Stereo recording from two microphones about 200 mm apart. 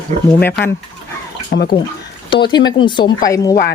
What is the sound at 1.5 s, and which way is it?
Speech, 50° left (ahead or behind).